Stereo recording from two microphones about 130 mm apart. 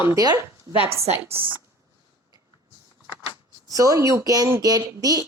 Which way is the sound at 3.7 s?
25° right (ahead or behind).